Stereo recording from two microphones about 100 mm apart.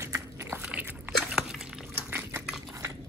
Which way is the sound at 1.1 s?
5° right (ahead or behind).